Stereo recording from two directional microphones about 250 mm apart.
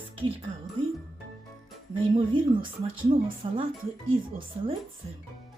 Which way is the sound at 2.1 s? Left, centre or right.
Right.